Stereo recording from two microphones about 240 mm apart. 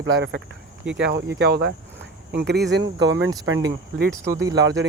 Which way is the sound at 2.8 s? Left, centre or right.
Centre.